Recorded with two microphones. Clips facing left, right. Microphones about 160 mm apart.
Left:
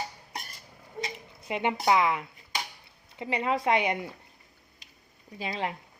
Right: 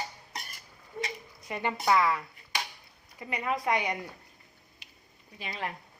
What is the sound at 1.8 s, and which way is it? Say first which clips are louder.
Speech: even; 20° left (ahead or behind).